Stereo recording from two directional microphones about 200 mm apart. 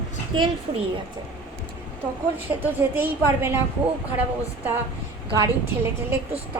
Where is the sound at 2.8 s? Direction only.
10° right (ahead or behind).